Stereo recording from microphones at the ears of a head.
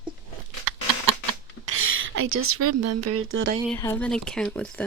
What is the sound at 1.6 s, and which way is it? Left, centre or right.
Speech, right.